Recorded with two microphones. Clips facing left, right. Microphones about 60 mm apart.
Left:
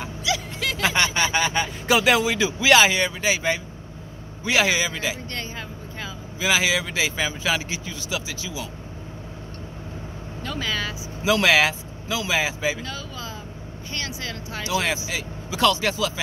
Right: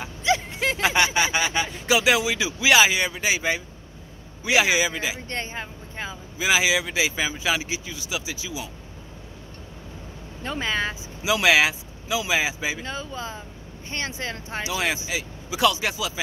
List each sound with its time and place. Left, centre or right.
0.2 s speech: right; by 5.1 s centre
5.3 s vehicle: right
6.4 s speech: centre
10.4 s speech: right
11.2 s speech: centre
12.8 s speech: right
15.0 s speech: centre